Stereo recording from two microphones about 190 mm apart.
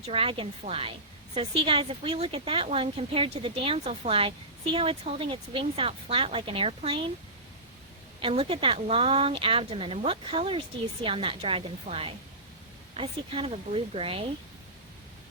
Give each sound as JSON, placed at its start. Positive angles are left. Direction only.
{"t": 0.0, "sound": "speech", "side_deg": -30}
{"t": 8.2, "sound": "speech", "side_deg": -30}